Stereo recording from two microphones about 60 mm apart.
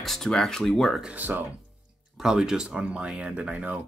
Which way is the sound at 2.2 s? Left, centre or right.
Centre.